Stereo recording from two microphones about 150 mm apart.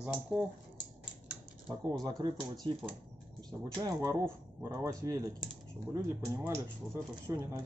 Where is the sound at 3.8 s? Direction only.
25° right (ahead or behind).